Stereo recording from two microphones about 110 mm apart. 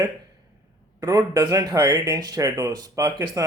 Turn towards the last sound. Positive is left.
turn(degrees=-35)  # may be behind; listen again after turning